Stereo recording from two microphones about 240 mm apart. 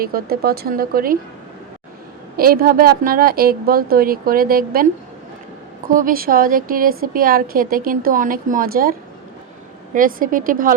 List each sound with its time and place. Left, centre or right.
0.0 s a woman's voice: right
2.3 s a woman's voice: right
5.9 s a woman's voice: right